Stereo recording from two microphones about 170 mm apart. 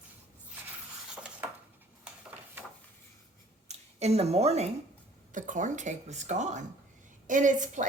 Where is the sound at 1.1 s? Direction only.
5° right (ahead or behind).